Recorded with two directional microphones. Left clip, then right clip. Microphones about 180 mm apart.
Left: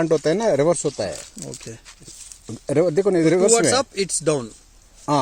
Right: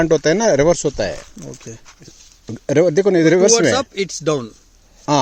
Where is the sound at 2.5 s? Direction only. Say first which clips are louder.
Right 5 dB; 40° right (ahead or behind).